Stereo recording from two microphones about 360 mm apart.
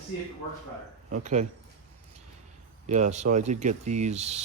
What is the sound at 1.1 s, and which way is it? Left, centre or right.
Speech, centre.